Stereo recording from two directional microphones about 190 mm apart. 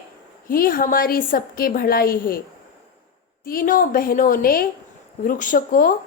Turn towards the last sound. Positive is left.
turn(degrees=45)  # may be behind; listen again after turning